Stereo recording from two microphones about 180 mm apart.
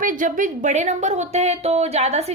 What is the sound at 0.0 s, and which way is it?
Speech, 45° right (ahead or behind).